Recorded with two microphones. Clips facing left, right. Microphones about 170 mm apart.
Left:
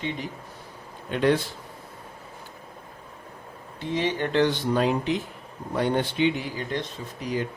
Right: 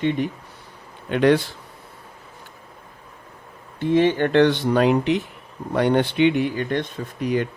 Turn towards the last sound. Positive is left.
turn(degrees=-60)  # may be behind; listen again after turning